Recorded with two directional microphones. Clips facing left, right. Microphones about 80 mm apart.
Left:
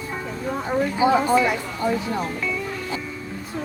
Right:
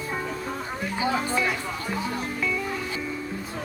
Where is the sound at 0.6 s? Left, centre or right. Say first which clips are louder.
Left 13 dB; centre.